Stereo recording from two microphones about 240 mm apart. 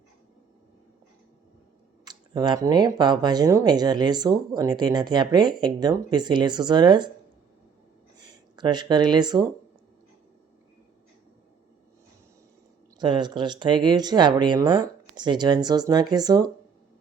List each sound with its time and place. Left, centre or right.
2.0 s speech: centre
8.2 s speech: centre
13.0 s speech: centre